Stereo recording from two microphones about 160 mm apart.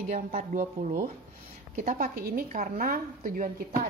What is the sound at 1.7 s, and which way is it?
Speech, 55° right (ahead or behind).